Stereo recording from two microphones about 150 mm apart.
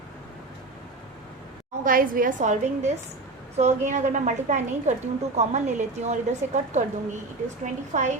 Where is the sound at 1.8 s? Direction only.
70° right (ahead or behind); by 6.1 s 50° right (ahead or behind).